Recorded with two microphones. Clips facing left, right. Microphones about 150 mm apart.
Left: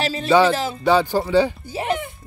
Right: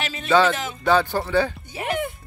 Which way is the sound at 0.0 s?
35° left (ahead or behind).